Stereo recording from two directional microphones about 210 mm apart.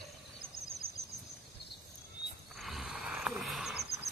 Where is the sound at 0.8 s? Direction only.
45° right (ahead or behind).